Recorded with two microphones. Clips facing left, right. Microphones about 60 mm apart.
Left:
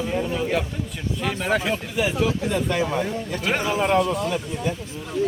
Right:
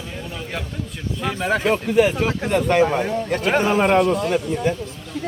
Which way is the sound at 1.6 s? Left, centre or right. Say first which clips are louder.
Right 7 dB; right.